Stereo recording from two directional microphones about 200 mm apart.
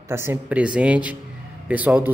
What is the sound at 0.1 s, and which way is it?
A man's voice, 10° right (ahead or behind).